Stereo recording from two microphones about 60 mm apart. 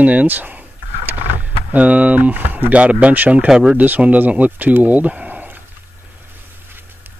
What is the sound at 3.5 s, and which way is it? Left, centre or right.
Speech, centre.